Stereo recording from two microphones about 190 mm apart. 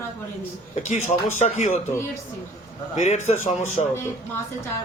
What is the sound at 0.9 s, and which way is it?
Speech, 40° left (ahead or behind).